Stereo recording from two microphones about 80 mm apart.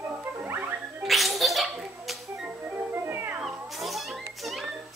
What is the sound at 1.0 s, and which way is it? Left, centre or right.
Music, centre.